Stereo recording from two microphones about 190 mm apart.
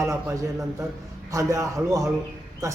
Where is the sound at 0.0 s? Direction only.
15° right (ahead or behind).